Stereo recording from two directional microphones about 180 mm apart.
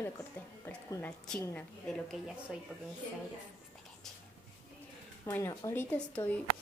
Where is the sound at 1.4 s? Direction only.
5° left (ahead or behind).